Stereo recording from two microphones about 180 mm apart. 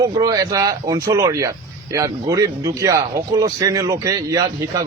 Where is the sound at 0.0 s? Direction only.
20° right (ahead or behind).